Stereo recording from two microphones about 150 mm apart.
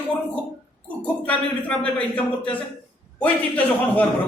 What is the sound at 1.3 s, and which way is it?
A man's voice, 10° left (ahead or behind).